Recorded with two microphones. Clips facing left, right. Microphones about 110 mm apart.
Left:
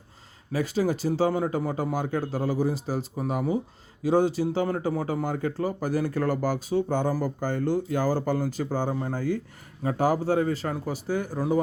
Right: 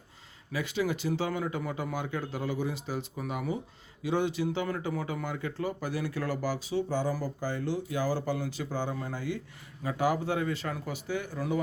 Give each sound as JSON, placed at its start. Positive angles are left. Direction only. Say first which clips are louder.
{"t": 0.5, "sound": "speech", "louder": "left 5 dB", "side_deg": 40}